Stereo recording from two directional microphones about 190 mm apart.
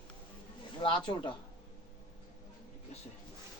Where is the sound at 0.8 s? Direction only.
25° left (ahead or behind).